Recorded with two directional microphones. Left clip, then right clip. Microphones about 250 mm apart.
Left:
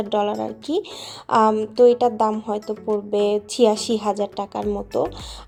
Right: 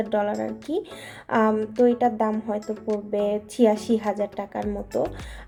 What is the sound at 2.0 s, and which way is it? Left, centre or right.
A woman's voice, centre.